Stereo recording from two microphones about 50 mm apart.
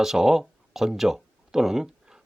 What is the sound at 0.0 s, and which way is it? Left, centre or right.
Speech, centre.